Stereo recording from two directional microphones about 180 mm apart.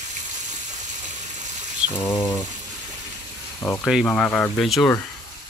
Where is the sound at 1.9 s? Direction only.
15° left (ahead or behind).